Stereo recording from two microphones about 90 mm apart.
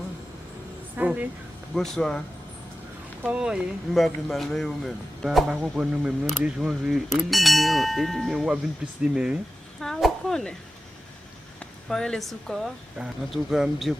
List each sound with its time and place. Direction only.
0.9 s speech: 15° right (ahead or behind)
1.7 s speech: 5° left (ahead or behind)
3.2 s speech: 10° right (ahead or behind)
9.8 s speech: 5° left (ahead or behind)
11.6 s speech: 5° left (ahead or behind)